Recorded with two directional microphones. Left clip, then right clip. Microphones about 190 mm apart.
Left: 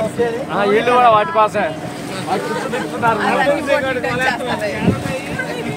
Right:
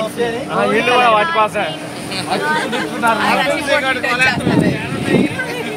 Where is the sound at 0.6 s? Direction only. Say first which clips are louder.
Even; 55° left (ahead or behind).